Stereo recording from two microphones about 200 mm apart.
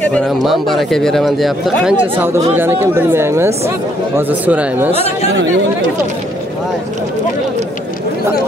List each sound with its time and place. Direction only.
0.0 s a man's voice: 5° left (ahead or behind)
2.5 s speech: 10° right (ahead or behind)